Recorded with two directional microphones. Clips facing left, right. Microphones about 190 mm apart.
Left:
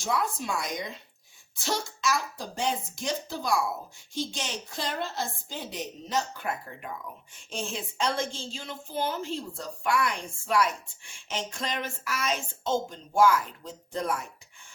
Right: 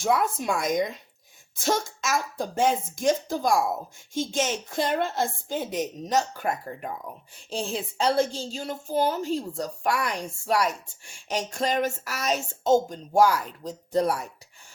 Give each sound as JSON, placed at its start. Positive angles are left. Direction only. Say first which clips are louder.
{"t": 0.0, "sound": "a woman's voice", "louder": "right 5 dB", "side_deg": -55}